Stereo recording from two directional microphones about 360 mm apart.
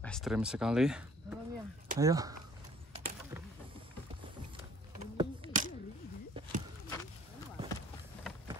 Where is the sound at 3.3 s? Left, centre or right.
Centre.